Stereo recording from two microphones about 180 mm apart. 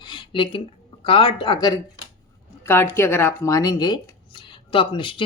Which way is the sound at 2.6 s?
10° left (ahead or behind).